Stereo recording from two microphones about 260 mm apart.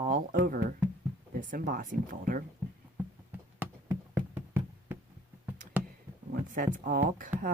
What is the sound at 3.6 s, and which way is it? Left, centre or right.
Knock, centre.